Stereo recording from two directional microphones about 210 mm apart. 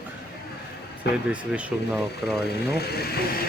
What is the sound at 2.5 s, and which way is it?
Speech, 50° left (ahead or behind).